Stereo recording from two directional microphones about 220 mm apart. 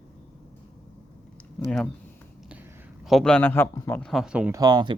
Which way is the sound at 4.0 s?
Centre (ahead or behind).